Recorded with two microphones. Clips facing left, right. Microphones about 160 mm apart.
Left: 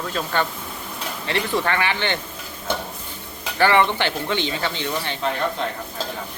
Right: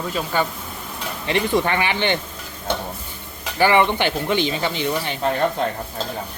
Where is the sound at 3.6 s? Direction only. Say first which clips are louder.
Right 1 dB; 15° right (ahead or behind).